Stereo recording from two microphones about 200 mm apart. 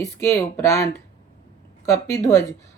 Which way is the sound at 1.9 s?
15° left (ahead or behind).